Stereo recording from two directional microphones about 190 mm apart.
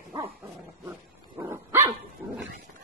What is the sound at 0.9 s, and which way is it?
Dog, 10° right (ahead or behind).